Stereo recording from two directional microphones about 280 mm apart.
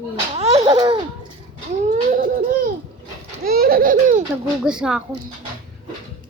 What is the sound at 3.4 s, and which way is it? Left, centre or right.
Laughter, right.